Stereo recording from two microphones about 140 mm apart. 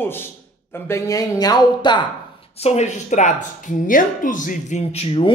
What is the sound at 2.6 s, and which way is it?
Speech, 50° left (ahead or behind).